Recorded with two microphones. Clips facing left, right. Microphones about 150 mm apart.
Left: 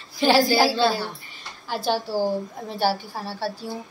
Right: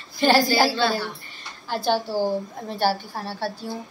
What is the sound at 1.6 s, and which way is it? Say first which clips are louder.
A woman's voice: right 1 dB; 5° left (ahead or behind).